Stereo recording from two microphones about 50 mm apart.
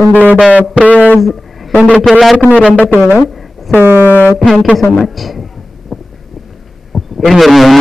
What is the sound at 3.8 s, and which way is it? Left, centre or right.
Speech, right.